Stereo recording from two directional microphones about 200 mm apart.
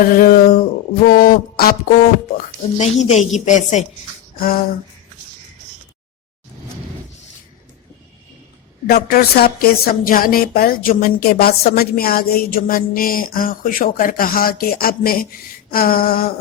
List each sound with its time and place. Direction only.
0.0 s speech: 45° left (ahead or behind)
2.7 s a woman's voice: 35° left (ahead or behind)
4.4 s a sound: 45° left (ahead or behind)
8.9 s speech: 50° left (ahead or behind)